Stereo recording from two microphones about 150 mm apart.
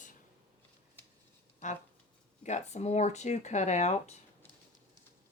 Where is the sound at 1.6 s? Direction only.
55° left (ahead or behind).